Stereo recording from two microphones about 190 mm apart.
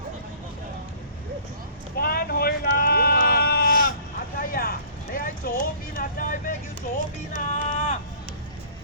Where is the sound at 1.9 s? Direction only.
50° left (ahead or behind).